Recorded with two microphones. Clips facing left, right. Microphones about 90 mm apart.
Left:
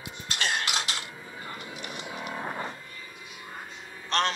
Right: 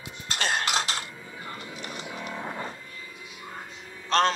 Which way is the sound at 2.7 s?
30° left (ahead or behind).